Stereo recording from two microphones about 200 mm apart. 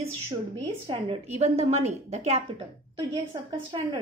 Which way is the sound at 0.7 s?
30° right (ahead or behind).